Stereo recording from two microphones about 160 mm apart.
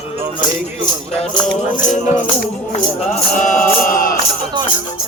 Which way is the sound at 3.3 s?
55° left (ahead or behind).